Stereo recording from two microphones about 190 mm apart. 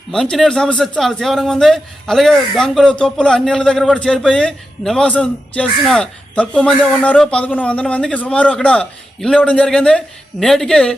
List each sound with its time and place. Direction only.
0.1 s a man's voice: 5° left (ahead or behind)